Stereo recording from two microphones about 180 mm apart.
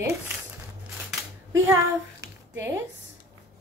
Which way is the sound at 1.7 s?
15° right (ahead or behind).